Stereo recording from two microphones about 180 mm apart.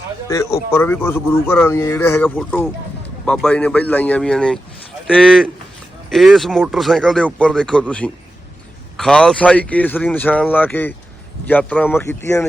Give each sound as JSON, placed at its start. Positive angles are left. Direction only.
{"t": 0.3, "sound": "speech", "side_deg": 15}